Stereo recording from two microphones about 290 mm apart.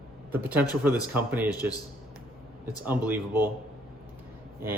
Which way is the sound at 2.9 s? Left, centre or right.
Centre.